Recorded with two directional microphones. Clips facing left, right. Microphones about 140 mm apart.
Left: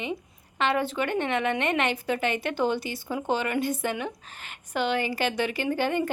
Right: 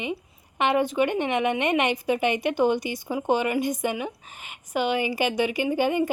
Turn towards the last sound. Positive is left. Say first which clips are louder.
# right 3 dB
turn(degrees=-10)  # may be behind; listen again after turning